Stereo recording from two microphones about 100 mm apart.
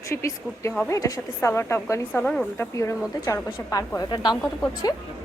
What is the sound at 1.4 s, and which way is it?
A woman's voice, 25° left (ahead or behind).